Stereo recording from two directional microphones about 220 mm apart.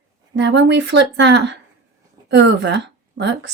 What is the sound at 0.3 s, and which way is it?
Speech, 55° right (ahead or behind).